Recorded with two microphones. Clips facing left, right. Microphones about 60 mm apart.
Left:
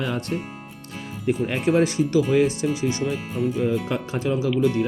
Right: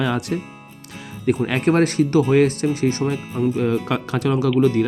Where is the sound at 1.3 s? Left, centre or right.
Right.